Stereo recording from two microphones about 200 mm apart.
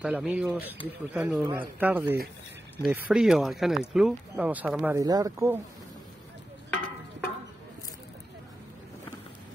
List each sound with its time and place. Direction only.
0.0 s speech: 5° right (ahead or behind)
4.9 s speech: 20° right (ahead or behind)